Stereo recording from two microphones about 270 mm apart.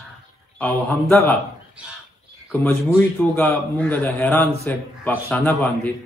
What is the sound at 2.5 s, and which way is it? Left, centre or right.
A man's voice, centre.